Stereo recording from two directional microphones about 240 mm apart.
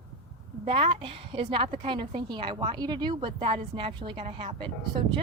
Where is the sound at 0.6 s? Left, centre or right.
Right.